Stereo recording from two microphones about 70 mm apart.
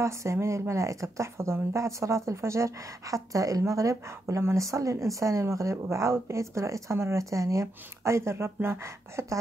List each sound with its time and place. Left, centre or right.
0.0 s speech: right